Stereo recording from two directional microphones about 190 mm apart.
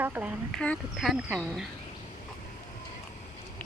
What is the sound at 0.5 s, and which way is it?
Speech, 5° left (ahead or behind).